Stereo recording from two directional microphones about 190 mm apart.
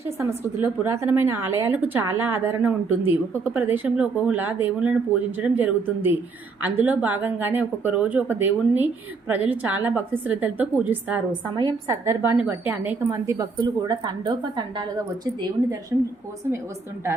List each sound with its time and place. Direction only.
0.2 s a woman's voice: 10° right (ahead or behind)